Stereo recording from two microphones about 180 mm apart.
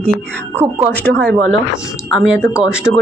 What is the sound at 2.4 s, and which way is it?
Speech, 10° left (ahead or behind).